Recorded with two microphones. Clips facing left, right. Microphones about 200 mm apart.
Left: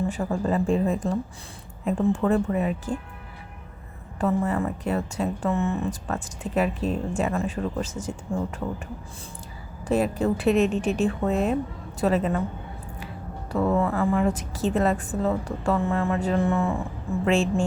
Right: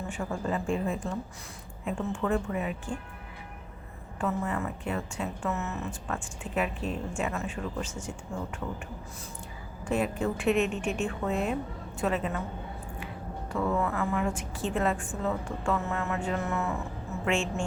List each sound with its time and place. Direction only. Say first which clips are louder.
0.1 s a woman's voice: left 6 dB; 35° left (ahead or behind)
4.2 s a woman's voice: left 7 dB; 35° left (ahead or behind)
9.8 s a woman's voice: left 5 dB; 35° left (ahead or behind)
13.5 s a woman's voice: left 6 dB; 35° left (ahead or behind)